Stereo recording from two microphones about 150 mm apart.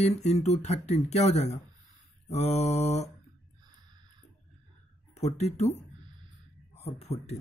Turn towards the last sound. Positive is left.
turn(degrees=45)  # may be behind; listen again after turning